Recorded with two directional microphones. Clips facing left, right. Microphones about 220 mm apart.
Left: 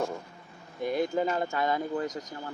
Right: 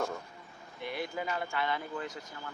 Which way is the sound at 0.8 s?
45° left (ahead or behind).